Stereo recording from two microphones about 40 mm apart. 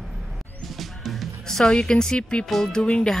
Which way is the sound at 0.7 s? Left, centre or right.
Centre.